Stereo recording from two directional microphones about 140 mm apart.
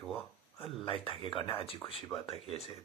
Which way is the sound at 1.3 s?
40° left (ahead or behind).